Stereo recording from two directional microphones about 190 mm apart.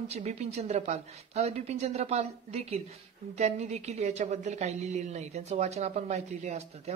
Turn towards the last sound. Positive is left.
turn(degrees=-35)  # may be behind; listen again after turning